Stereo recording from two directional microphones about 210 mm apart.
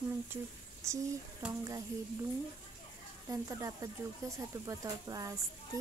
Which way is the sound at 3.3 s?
15° right (ahead or behind).